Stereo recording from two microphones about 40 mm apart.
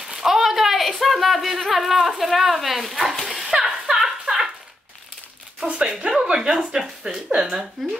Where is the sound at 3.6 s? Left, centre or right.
Centre.